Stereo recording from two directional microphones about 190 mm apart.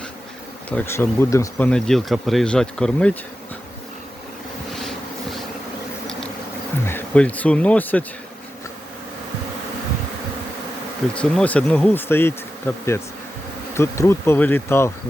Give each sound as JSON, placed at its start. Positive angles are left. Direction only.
{"t": 0.7, "sound": "speech", "side_deg": 10}
{"t": 6.8, "sound": "speech", "side_deg": 10}
{"t": 11.1, "sound": "bee", "side_deg": 5}